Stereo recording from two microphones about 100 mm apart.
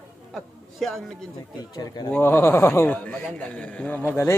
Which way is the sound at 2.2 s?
20° left (ahead or behind).